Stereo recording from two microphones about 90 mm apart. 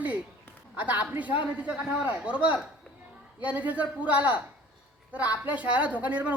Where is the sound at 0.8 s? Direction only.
20° right (ahead or behind).